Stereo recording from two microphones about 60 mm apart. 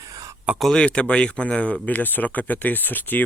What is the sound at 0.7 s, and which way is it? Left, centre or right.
Speech, centre.